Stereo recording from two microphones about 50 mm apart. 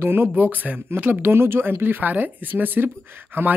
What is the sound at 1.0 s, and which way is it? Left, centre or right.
Speech, right.